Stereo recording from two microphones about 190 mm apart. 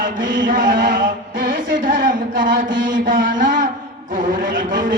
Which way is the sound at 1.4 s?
45° right (ahead or behind).